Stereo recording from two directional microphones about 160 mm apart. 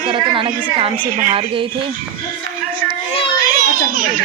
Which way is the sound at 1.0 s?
55° right (ahead or behind).